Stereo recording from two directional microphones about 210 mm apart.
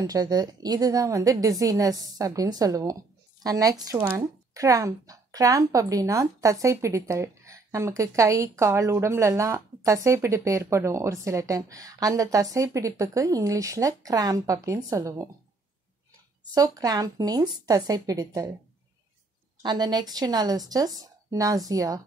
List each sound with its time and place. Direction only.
0.0 s speech: 20° right (ahead or behind)
16.5 s speech: 15° right (ahead or behind)
19.6 s speech: 20° right (ahead or behind)